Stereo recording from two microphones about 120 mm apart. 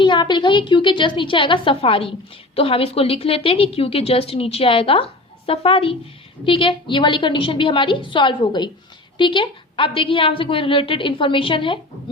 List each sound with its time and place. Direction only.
0.0 s a woman's voice: 40° left (ahead or behind)